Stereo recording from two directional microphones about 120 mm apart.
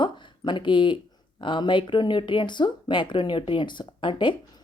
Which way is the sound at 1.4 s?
40° left (ahead or behind).